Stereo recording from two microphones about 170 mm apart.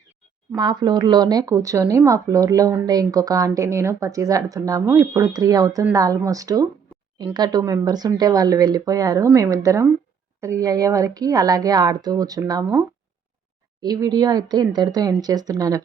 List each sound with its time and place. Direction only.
0.5 s speech: 25° right (ahead or behind)
13.8 s speech: 20° right (ahead or behind)